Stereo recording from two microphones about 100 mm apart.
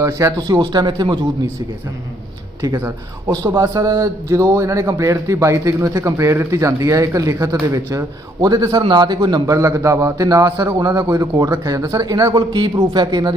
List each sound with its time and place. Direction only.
0.0 s speech: 35° right (ahead or behind); by 1.2 s 55° right (ahead or behind)
2.7 s a man's voice: 25° right (ahead or behind); by 13.3 s 45° right (ahead or behind)